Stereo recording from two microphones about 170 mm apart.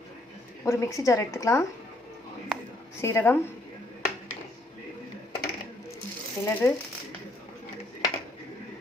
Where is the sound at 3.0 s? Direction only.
15° left (ahead or behind).